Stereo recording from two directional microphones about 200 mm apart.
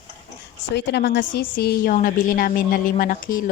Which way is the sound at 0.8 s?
60° left (ahead or behind).